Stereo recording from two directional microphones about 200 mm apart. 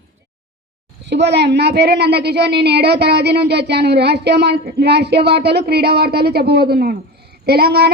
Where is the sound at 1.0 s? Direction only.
60° right (ahead or behind).